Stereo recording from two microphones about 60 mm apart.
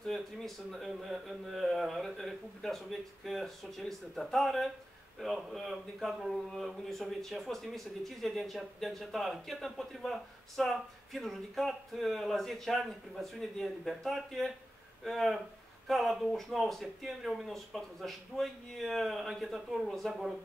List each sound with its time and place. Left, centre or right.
0.0 s a man's voice: centre